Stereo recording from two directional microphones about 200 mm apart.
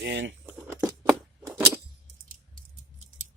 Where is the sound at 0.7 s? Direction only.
15° right (ahead or behind).